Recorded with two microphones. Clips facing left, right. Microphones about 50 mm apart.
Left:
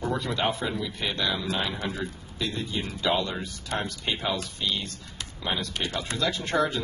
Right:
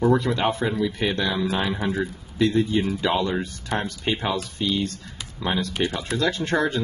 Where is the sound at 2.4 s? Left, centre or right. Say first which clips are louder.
Right 10 dB; right.